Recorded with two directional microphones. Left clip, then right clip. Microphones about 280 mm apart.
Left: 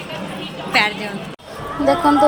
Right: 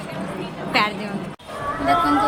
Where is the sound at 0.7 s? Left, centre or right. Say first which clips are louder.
Left 3 dB; centre.